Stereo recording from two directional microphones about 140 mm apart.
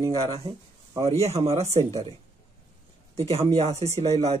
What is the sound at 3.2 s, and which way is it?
Speech, 45° right (ahead or behind).